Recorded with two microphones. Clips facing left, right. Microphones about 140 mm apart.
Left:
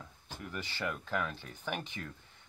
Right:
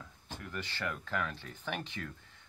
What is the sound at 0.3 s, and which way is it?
Speech, 10° left (ahead or behind).